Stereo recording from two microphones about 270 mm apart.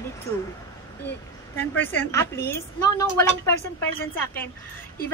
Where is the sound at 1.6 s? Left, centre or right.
Centre.